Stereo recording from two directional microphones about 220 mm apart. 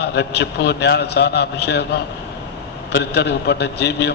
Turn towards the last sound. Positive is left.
turn(degrees=50)  # may be behind; listen again after turning